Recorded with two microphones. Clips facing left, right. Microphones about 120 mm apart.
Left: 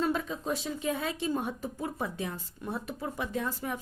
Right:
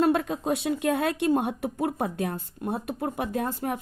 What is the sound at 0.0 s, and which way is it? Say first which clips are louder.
A woman's voice: right 7 dB; 65° right (ahead or behind).